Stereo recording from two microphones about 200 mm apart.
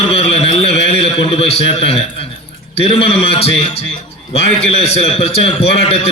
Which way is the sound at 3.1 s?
30° left (ahead or behind).